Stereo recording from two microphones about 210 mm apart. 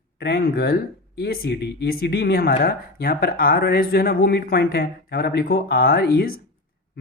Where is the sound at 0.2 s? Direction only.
50° left (ahead or behind).